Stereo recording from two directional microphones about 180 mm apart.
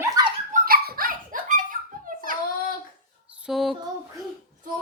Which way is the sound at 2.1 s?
50° right (ahead or behind).